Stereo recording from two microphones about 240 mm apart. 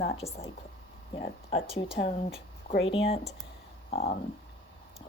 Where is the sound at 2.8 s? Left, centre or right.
Left.